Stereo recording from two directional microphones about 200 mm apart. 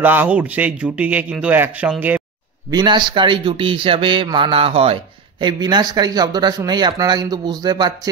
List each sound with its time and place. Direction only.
0.0 s speech: 10° right (ahead or behind)
2.7 s speech: 20° right (ahead or behind)